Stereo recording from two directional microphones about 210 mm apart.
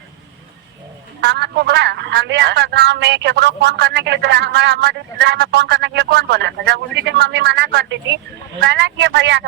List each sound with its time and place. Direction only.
1.2 s speech: 55° right (ahead or behind)